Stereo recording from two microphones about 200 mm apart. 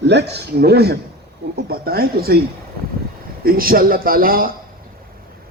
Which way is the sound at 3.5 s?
45° right (ahead or behind).